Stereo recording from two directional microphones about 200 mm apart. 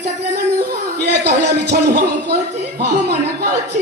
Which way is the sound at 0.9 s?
55° right (ahead or behind).